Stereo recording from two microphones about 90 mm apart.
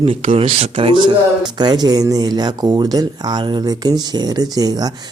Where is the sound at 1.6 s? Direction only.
50° right (ahead or behind).